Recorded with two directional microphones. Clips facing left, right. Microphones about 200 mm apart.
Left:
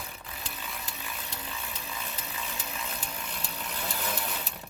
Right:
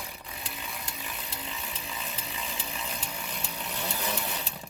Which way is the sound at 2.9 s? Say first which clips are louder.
Right 1 dB; 10° right (ahead or behind).